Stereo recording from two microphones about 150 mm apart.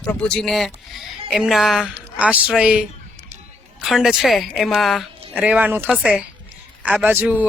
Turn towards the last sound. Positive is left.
turn(degrees=-10)  # may be behind; listen again after turning